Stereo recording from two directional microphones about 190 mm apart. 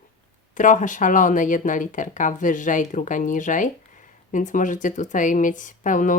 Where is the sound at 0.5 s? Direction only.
40° left (ahead or behind).